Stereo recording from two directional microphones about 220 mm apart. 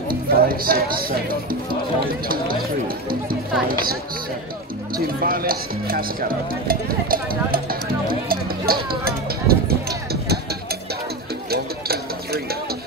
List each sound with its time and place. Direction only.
0.1 s speech: 40° right (ahead or behind)
4.9 s speech: 40° right (ahead or behind)
8.1 s music: 40° right (ahead or behind)
11.5 s a sound: 45° right (ahead or behind)